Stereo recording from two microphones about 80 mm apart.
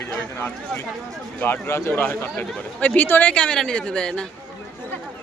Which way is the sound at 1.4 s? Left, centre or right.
Left.